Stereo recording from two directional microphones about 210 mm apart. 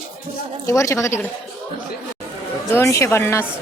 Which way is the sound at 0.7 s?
15° left (ahead or behind).